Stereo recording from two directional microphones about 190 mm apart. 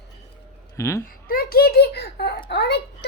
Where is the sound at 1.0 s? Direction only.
50° left (ahead or behind).